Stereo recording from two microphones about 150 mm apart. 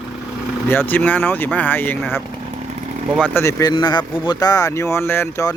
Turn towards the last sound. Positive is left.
turn(degrees=15)  # may be behind; listen again after turning